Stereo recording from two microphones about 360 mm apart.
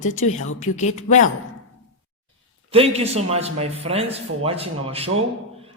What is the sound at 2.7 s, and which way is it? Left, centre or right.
A man's voice, centre.